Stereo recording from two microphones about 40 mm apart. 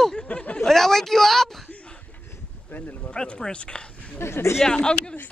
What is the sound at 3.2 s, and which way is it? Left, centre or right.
Speech, left.